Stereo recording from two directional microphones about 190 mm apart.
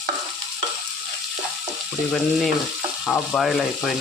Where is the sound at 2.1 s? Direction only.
Centre (ahead or behind).